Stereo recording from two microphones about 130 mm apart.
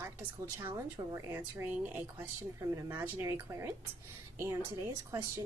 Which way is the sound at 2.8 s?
15° right (ahead or behind).